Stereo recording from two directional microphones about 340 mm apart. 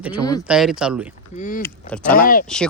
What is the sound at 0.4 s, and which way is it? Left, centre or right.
Speech, centre.